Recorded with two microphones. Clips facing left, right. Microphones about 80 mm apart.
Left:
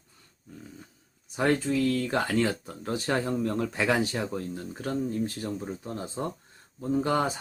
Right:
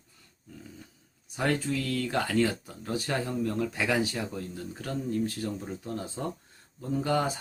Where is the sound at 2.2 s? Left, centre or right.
Left.